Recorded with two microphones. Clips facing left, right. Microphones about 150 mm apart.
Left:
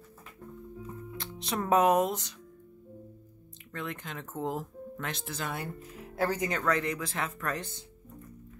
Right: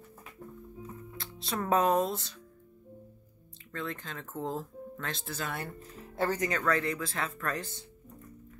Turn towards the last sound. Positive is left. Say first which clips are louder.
# left 1 dB
turn(degrees=15)  # may be behind; listen again after turning